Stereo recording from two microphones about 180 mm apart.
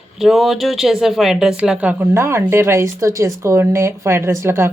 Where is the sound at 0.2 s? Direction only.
Centre (ahead or behind).